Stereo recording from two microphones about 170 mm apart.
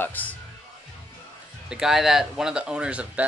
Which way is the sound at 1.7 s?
Centre (ahead or behind).